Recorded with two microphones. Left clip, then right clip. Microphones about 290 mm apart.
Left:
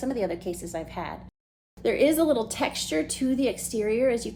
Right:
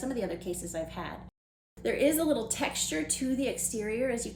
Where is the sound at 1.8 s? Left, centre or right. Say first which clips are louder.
Left 5 dB; left.